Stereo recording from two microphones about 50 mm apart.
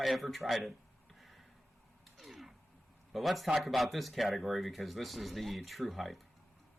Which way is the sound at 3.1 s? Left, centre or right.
Centre.